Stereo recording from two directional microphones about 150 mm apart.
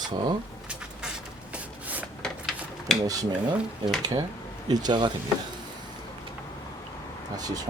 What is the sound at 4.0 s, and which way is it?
Speech, 30° right (ahead or behind).